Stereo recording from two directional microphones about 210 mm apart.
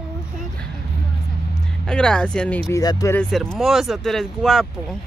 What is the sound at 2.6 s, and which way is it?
Speech, 15° left (ahead or behind).